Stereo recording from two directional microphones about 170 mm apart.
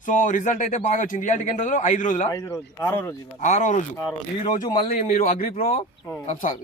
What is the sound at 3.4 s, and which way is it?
Speech, 45° left (ahead or behind).